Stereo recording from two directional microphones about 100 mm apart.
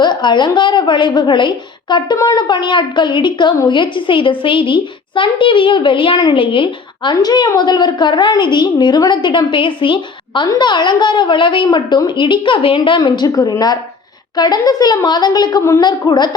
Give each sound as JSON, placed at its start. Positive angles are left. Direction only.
{"t": 0.0, "sound": "a child's voice", "side_deg": 50}